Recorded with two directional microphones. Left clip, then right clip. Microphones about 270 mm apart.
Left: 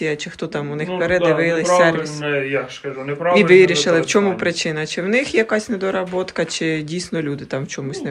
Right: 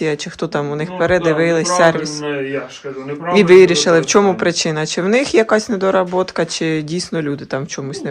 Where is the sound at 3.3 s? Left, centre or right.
Centre.